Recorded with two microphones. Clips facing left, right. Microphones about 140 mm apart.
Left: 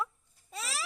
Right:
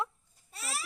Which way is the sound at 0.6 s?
90° left.